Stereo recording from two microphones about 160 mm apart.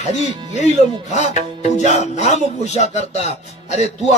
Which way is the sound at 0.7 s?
45° left (ahead or behind).